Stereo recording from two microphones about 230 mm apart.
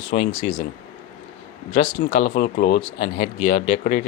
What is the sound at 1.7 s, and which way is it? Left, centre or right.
Speech, left.